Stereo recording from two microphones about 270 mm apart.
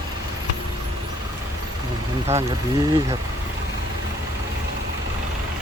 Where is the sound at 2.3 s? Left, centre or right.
Right.